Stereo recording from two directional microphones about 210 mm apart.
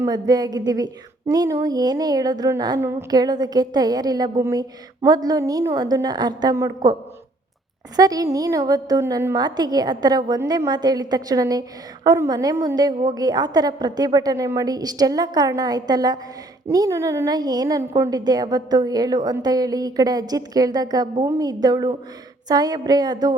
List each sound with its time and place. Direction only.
0.0 s a woman's voice: 20° right (ahead or behind)
7.9 s a woman's voice: 15° right (ahead or behind)